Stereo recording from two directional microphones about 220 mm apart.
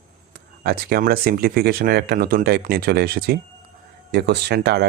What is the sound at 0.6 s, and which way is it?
Speech, 45° right (ahead or behind).